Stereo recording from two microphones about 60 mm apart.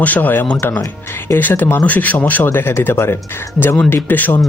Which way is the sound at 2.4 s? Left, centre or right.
Left.